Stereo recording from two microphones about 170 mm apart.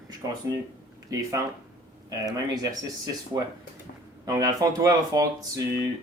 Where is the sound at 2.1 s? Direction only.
20° right (ahead or behind).